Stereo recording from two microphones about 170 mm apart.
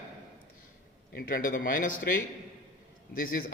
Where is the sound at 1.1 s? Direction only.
60° left (ahead or behind).